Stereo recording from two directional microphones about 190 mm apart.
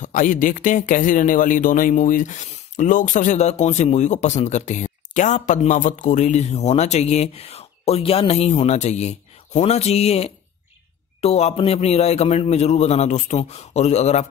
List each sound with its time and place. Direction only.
0.0 s speech: 45° left (ahead or behind)